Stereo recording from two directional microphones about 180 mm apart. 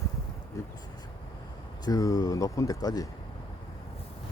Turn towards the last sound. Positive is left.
turn(degrees=20)  # may be behind; listen again after turning